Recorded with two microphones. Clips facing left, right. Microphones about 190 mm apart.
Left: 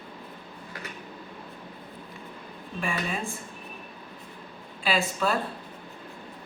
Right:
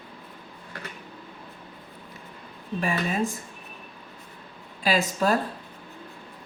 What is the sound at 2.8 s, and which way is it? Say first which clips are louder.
Speech: right 5 dB; 40° right (ahead or behind).